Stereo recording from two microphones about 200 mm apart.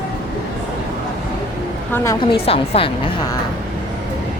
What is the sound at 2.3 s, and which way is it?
Speech, 30° left (ahead or behind).